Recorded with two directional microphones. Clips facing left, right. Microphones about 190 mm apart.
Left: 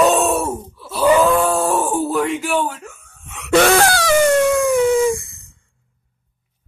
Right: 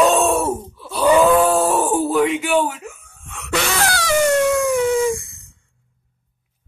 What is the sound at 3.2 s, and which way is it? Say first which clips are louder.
Wheeze: even; 5° left (ahead or behind).